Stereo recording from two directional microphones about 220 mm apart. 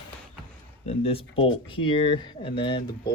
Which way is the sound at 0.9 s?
25° left (ahead or behind).